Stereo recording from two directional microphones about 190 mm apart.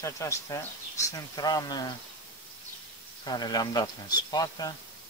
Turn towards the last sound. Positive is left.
turn(degrees=20)  # may be behind; listen again after turning